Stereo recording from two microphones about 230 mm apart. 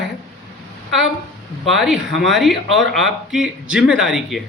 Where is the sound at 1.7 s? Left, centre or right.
Centre.